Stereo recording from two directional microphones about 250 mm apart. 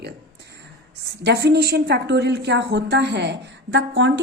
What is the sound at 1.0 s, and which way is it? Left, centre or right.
A woman's voice, right.